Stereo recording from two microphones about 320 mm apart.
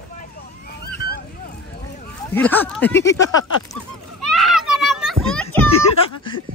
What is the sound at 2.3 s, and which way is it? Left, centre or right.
Speech, centre.